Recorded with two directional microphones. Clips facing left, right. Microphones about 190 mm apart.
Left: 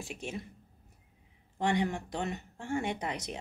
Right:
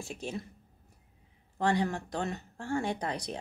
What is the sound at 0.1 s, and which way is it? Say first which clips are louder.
Speech: right 3 dB; 35° right (ahead or behind).